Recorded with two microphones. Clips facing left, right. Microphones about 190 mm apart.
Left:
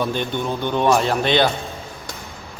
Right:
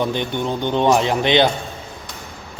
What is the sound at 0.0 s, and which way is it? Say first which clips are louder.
Speech: right 1 dB; 15° right (ahead or behind).